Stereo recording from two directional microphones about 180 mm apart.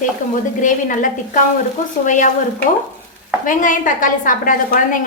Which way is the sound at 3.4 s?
45° left (ahead or behind).